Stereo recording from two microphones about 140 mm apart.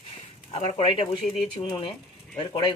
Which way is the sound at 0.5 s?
50° left (ahead or behind).